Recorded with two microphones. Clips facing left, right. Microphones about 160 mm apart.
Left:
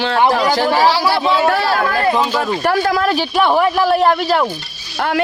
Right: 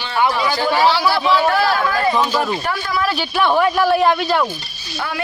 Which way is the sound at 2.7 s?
75° left (ahead or behind).